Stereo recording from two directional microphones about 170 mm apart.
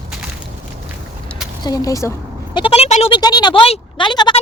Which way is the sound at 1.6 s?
20° left (ahead or behind).